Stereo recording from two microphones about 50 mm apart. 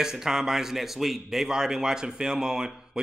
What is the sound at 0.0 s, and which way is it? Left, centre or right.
A man's voice, centre.